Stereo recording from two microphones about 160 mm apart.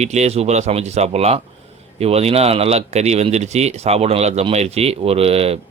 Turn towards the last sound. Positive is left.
turn(degrees=-40)  # may be behind; listen again after turning